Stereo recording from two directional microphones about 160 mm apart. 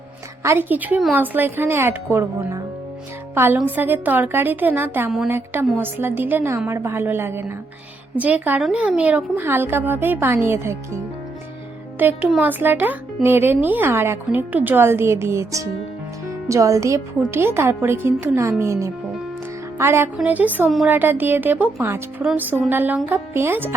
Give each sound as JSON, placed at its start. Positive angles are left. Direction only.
{"t": 0.4, "sound": "speech", "side_deg": -15}